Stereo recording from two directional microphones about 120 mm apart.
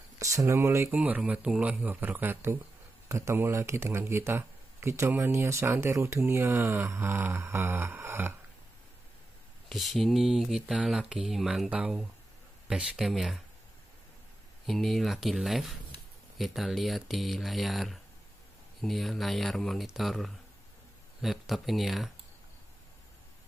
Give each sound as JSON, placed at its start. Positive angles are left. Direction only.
{"t": 0.2, "sound": "speech", "side_deg": -25}
{"t": 0.9, "sound": "a man's voice", "side_deg": -10}
{"t": 9.7, "sound": "speech", "side_deg": 0}
{"t": 14.7, "sound": "speech", "side_deg": 0}